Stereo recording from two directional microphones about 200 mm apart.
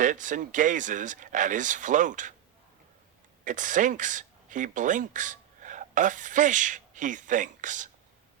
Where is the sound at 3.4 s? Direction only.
40° right (ahead or behind).